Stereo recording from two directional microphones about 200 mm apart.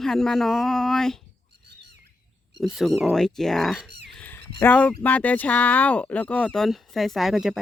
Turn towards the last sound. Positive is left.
turn(degrees=0)  # may be behind; listen again after turning